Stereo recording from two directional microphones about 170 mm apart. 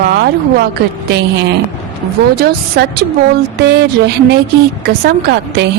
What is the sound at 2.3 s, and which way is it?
Speech, 70° right (ahead or behind).